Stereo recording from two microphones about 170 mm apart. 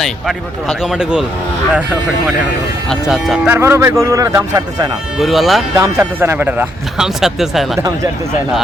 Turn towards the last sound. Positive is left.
turn(degrees=0)  # may be behind; listen again after turning